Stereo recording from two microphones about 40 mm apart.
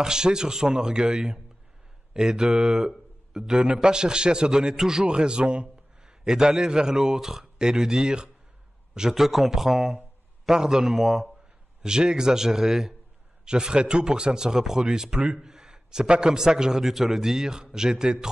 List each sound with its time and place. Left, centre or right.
0.0 s a man's voice: centre
2.9 s a sound: centre
3.5 s a man's voice: right
3.9 s a man's voice: right
9.1 s a man's voice: centre
11.8 s a man's voice: centre